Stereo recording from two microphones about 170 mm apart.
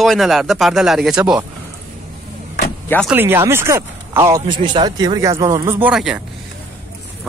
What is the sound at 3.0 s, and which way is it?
Speech, 10° right (ahead or behind).